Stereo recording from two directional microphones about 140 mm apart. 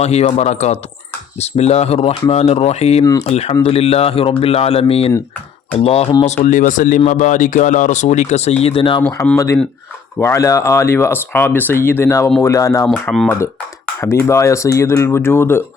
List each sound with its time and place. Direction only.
0.0 s speech: 50° left (ahead or behind)
3.0 s speech: 25° left (ahead or behind)
3.2 s speech: 50° left (ahead or behind)
6.2 s speech: 55° left (ahead or behind)
8.6 s speech: 40° left (ahead or behind)
9.3 s speech: 20° left (ahead or behind)
12.9 s speech: 5° left (ahead or behind)
14.0 s speech: 20° left (ahead or behind)